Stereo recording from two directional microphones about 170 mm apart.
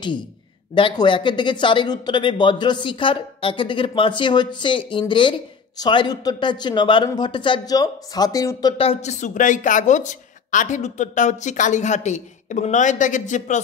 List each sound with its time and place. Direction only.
0.7 s speech: 30° left (ahead or behind)
8.8 s a woman's voice: 45° left (ahead or behind)